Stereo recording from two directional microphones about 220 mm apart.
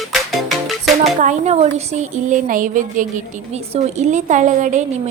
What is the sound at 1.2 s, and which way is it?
A woman's voice, 35° right (ahead or behind).